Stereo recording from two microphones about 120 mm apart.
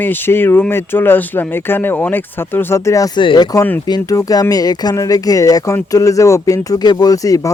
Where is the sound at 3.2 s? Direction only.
40° left (ahead or behind).